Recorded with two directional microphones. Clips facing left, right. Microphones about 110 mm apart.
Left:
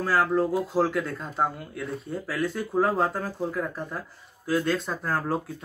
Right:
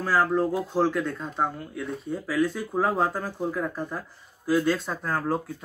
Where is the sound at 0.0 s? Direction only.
Centre (ahead or behind).